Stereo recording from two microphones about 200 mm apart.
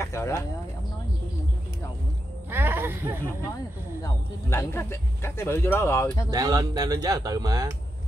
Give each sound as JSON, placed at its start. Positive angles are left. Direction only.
{"t": 0.0, "sound": "a sound", "side_deg": 15}
{"t": 2.5, "sound": "speech", "side_deg": -10}
{"t": 4.0, "sound": "speech", "side_deg": 15}
{"t": 6.3, "sound": "speech", "side_deg": -20}